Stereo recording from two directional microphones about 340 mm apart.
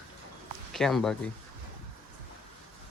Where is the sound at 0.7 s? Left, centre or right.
Centre.